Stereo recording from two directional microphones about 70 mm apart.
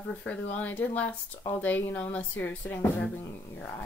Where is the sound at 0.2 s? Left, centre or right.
Centre.